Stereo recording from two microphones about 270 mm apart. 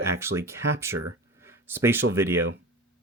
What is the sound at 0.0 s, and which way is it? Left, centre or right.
Speech, centre.